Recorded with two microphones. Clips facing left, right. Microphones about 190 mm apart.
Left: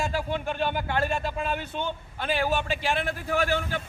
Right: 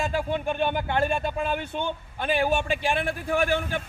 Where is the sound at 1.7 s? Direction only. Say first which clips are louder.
Right 2 dB; 15° right (ahead or behind).